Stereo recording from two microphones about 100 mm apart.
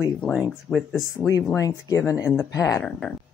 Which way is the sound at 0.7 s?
10° left (ahead or behind).